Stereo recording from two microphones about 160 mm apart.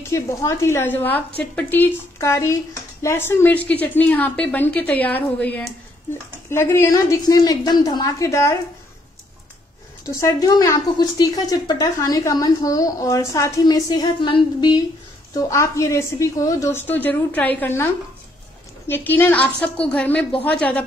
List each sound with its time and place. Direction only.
0.1 s a woman's voice: 20° left (ahead or behind)
10.0 s a woman's voice: 20° left (ahead or behind)
15.3 s a woman's voice: 20° left (ahead or behind)
18.9 s a woman's voice: 10° left (ahead or behind)